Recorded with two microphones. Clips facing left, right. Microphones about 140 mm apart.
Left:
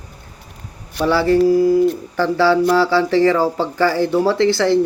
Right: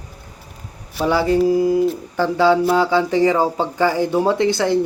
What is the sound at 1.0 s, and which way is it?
Speech, 20° right (ahead or behind).